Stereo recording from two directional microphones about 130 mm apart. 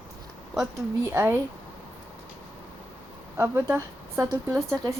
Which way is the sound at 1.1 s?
20° right (ahead or behind).